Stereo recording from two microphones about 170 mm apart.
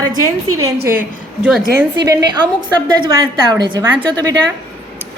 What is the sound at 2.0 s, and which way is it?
A woman's voice, 25° right (ahead or behind).